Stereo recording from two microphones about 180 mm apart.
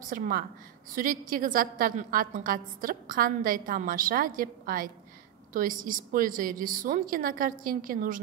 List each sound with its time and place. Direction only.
0.0 s a woman's voice: 50° right (ahead or behind)